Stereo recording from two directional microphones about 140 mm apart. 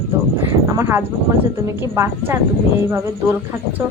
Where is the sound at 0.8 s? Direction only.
15° right (ahead or behind).